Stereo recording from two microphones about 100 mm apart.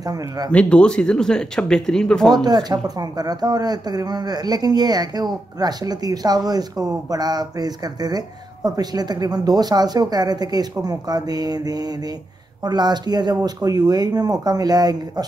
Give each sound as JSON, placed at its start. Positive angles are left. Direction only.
{"t": 0.0, "sound": "speech", "side_deg": -40}
{"t": 0.5, "sound": "speech", "side_deg": 10}
{"t": 2.4, "sound": "speech", "side_deg": -40}